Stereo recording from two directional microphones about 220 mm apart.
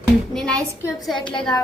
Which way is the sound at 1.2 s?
20° left (ahead or behind).